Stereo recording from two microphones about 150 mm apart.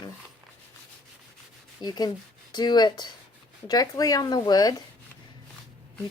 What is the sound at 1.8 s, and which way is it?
A woman's voice, 25° left (ahead or behind).